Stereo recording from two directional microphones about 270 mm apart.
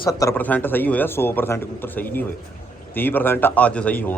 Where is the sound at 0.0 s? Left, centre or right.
Centre.